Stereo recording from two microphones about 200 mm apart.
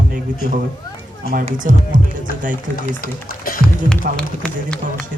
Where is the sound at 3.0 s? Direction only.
45° left (ahead or behind).